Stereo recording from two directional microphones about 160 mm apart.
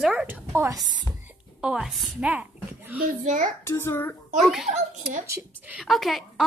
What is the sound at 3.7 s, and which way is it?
Speech, 15° left (ahead or behind).